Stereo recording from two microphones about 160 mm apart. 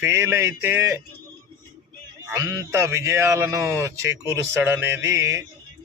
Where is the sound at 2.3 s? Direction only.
20° right (ahead or behind).